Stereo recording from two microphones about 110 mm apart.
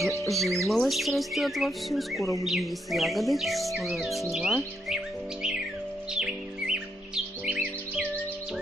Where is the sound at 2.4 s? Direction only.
Centre (ahead or behind).